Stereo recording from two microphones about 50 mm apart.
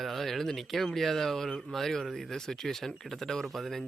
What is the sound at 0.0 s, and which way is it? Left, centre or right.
Speech, centre.